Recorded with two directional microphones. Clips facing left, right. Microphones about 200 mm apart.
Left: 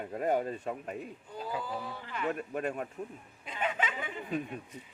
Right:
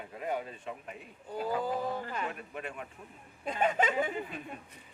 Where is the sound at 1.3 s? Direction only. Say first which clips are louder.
Right 5 dB; 45° right (ahead or behind).